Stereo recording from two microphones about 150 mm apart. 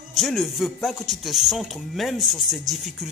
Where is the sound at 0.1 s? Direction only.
Centre (ahead or behind).